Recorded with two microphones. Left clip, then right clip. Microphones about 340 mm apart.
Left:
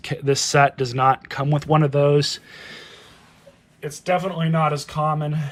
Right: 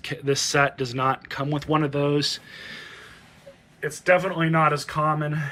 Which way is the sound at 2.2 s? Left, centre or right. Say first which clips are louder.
Left 1 dB; centre.